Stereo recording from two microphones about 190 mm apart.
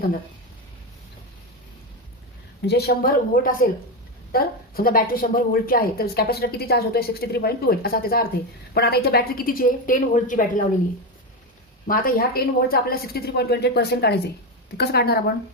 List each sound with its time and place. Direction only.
2.6 s a woman's voice: 55° left (ahead or behind)
11.9 s a woman's voice: 50° left (ahead or behind)